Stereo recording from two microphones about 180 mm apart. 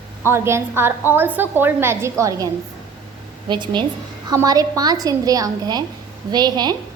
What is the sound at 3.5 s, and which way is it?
Speech, 25° right (ahead or behind).